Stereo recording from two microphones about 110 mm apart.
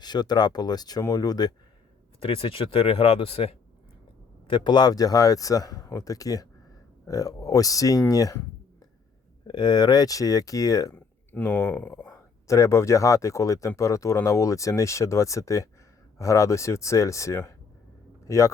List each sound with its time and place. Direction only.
0.0 s speech: 40° left (ahead or behind)
2.2 s speech: 55° left (ahead or behind)
4.4 s speech: 45° left (ahead or behind); by 8.4 s 30° left (ahead or behind)
9.5 s speech: 40° left (ahead or behind)
10.9 s a man's voice: 15° left (ahead or behind)